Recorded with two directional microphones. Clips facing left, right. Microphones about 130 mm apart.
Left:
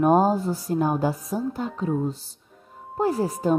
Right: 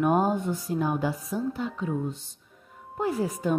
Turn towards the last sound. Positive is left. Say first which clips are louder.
# left 4 dB
turn(degrees=35)  # may be behind; listen again after turning